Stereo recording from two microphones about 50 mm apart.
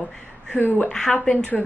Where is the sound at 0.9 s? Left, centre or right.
Centre.